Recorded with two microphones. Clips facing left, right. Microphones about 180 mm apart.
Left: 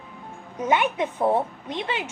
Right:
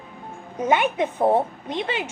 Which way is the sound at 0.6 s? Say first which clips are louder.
Right 2 dB; 50° right (ahead or behind).